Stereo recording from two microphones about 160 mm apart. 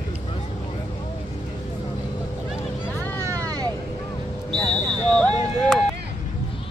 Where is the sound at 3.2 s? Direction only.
20° right (ahead or behind).